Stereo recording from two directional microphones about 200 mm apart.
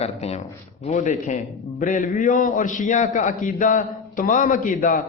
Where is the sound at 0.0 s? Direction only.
30° left (ahead or behind).